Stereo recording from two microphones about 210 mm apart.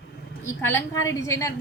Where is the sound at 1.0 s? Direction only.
15° left (ahead or behind).